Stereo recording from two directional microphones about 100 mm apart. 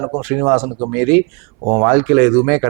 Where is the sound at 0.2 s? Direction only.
20° right (ahead or behind).